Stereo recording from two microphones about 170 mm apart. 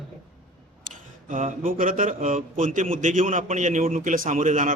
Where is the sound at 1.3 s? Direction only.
55° right (ahead or behind).